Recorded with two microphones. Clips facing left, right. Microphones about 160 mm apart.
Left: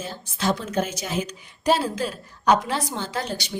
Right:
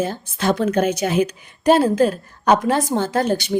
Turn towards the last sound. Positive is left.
turn(degrees=-50)  # may be behind; listen again after turning